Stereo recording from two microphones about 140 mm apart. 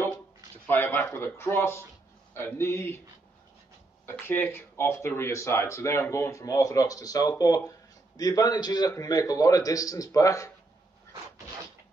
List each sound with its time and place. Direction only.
0.7 s speech: 15° left (ahead or behind)
4.0 s speech: 15° left (ahead or behind)